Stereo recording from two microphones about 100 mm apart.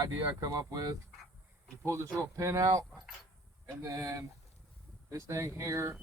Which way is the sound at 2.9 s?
5° right (ahead or behind).